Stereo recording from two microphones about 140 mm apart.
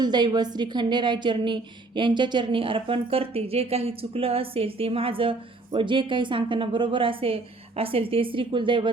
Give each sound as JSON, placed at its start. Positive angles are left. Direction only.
{"t": 0.0, "sound": "a woman's voice", "side_deg": -30}